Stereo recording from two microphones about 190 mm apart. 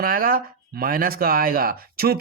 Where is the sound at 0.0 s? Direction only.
50° right (ahead or behind).